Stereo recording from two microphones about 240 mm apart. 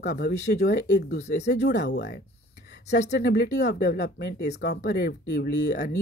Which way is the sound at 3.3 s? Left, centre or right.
Left.